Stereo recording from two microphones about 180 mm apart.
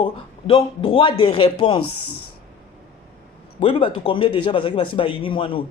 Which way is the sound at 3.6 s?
30° left (ahead or behind).